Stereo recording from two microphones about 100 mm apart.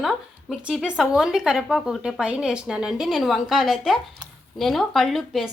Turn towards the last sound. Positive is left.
turn(degrees=0)  # may be behind; listen again after turning